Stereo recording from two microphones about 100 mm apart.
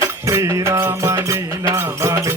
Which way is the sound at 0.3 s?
30° right (ahead or behind).